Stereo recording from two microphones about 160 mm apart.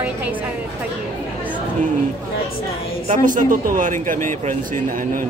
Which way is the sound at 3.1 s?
55° right (ahead or behind).